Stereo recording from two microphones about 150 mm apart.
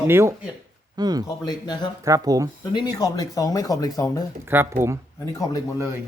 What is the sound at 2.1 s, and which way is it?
Speech, 25° right (ahead or behind).